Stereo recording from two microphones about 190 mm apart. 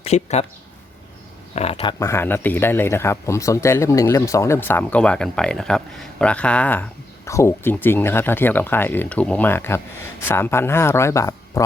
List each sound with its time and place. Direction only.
0.0 s speech: 35° left (ahead or behind)
1.5 s speech: 30° left (ahead or behind); by 11.6 s 15° left (ahead or behind)